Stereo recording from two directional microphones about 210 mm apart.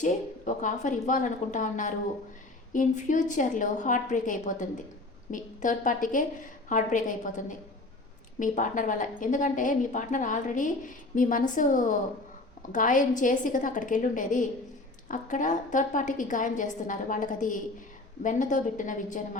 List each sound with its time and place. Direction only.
0.0 s a woman's voice: 35° left (ahead or behind)